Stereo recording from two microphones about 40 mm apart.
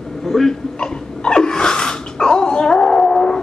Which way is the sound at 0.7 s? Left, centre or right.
Left.